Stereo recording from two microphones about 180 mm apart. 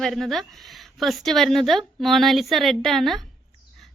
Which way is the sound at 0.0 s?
Centre (ahead or behind).